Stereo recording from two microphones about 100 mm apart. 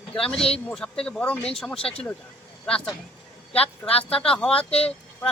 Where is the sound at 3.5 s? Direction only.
80° left.